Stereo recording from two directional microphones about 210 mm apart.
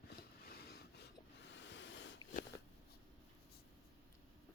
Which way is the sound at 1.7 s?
55° left (ahead or behind).